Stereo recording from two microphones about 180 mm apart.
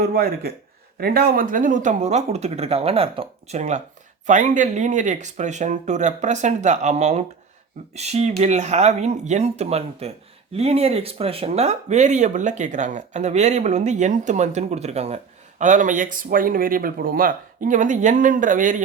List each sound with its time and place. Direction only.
0.0 s speech: 55° right (ahead or behind)